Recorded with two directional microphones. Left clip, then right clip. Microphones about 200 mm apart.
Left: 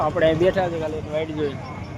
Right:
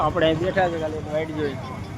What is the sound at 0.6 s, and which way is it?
Speech, 20° left (ahead or behind).